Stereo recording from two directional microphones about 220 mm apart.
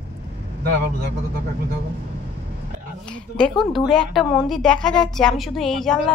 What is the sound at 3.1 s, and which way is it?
Speech, centre (ahead or behind).